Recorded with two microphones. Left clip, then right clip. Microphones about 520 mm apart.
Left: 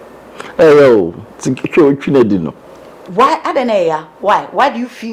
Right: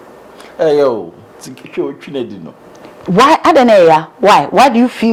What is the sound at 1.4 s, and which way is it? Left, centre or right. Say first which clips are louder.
Speech: left 11 dB; left.